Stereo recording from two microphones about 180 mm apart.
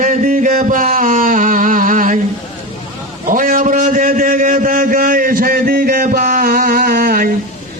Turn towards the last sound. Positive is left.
turn(degrees=-55)  # may be behind; listen again after turning